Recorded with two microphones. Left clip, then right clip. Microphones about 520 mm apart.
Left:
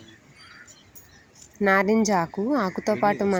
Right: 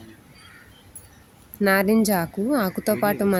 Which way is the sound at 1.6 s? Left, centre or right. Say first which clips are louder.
Right 1 dB; right.